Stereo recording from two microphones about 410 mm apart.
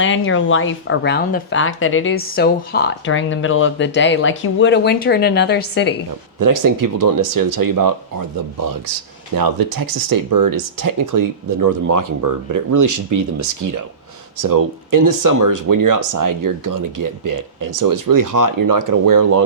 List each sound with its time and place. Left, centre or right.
0.0 s speech: left
6.4 s speech: right
14.4 s speech: right